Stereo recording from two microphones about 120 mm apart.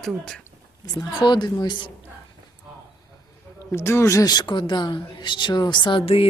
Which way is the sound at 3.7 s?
20° left (ahead or behind).